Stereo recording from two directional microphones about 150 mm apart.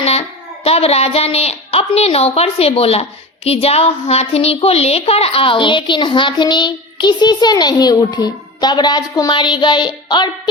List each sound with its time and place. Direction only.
0.0 s speech: 40° left (ahead or behind)